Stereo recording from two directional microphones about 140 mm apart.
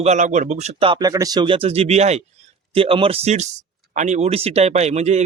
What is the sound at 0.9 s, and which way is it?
Speech, 25° right (ahead or behind).